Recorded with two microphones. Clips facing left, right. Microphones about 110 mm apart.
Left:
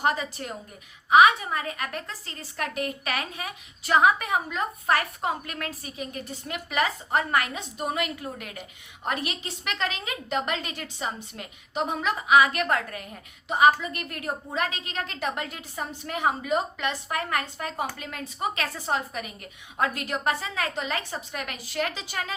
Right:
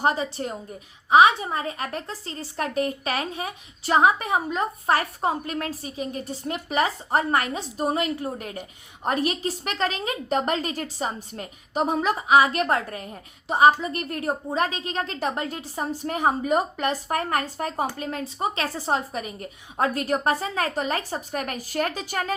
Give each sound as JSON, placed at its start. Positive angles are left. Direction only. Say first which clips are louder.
{"t": 0.0, "sound": "a woman's voice", "louder": "right 3 dB", "side_deg": -30}